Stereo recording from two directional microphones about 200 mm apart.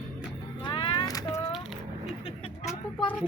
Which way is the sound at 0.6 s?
25° left (ahead or behind).